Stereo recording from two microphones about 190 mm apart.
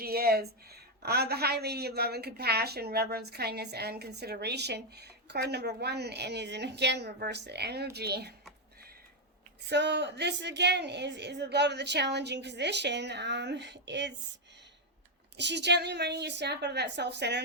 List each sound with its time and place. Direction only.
0.0 s speech: 55° right (ahead or behind)
9.6 s speech: 65° right (ahead or behind)
15.4 s speech: 65° right (ahead or behind)